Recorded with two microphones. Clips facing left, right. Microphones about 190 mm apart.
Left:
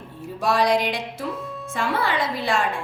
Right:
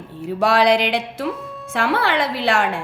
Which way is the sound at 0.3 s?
70° right (ahead or behind).